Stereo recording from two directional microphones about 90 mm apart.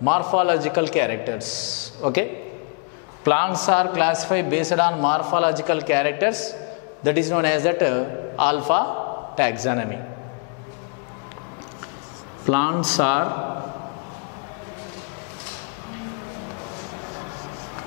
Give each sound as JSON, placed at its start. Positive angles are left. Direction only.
{"t": 0.0, "sound": "a man's voice", "side_deg": 10}
{"t": 3.3, "sound": "a man's voice", "side_deg": 10}
{"t": 12.4, "sound": "a man's voice", "side_deg": 10}